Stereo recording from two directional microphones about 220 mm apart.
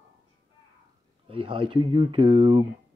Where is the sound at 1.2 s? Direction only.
25° right (ahead or behind).